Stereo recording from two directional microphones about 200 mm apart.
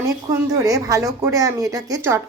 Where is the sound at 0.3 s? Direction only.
15° right (ahead or behind).